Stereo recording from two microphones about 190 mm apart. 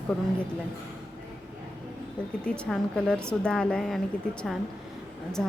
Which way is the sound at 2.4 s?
5° left (ahead or behind).